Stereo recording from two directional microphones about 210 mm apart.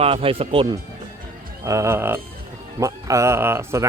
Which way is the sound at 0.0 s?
25° right (ahead or behind).